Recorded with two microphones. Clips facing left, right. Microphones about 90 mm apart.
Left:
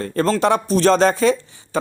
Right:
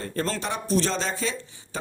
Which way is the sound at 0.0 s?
80° left.